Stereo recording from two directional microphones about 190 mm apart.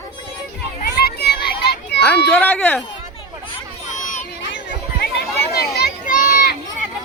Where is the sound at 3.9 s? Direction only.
40° left (ahead or behind).